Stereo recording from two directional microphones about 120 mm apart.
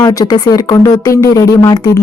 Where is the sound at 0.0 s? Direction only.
30° left (ahead or behind).